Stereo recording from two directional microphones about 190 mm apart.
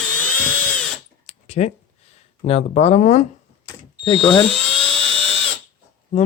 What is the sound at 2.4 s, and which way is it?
Speech, 35° left (ahead or behind).